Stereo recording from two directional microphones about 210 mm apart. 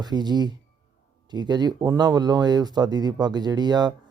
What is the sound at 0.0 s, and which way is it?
Speech, 20° right (ahead or behind).